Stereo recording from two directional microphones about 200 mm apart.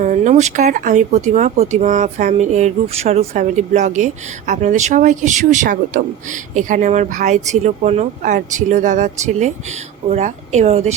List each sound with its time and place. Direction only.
0.0 s speech: 40° right (ahead or behind)